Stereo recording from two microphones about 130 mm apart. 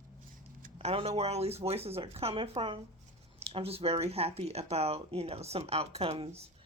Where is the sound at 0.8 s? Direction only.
50° right (ahead or behind).